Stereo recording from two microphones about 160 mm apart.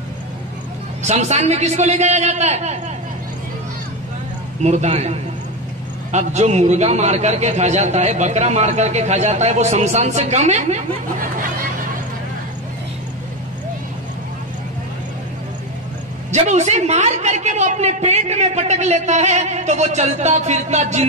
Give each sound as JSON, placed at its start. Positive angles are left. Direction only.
{"t": 1.0, "sound": "a woman's voice", "side_deg": -45}
{"t": 4.6, "sound": "a woman's voice", "side_deg": -45}
{"t": 16.3, "sound": "a woman's voice", "side_deg": -45}